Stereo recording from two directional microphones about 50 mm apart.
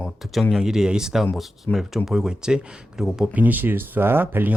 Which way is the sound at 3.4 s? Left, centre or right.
Right.